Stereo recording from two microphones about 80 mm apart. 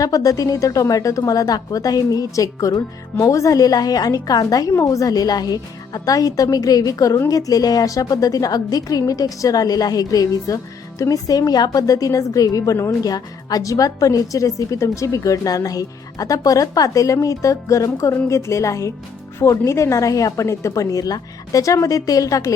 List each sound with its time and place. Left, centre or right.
0.0 s a woman's voice: left